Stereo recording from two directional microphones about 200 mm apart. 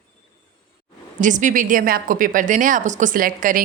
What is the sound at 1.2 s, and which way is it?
A woman's voice, 40° right (ahead or behind).